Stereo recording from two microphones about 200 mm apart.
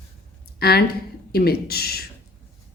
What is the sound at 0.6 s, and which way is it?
Speech, 50° left (ahead or behind).